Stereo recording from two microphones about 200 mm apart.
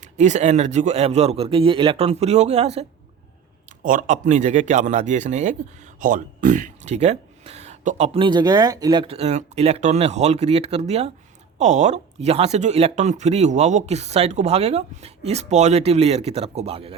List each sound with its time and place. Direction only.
0.0 s a man's voice: 35° right (ahead or behind)